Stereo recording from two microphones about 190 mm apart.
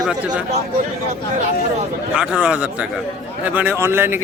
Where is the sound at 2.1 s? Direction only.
5° right (ahead or behind).